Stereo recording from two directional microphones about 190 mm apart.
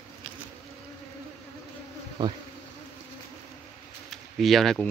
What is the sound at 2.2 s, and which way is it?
Bee, 20° right (ahead or behind).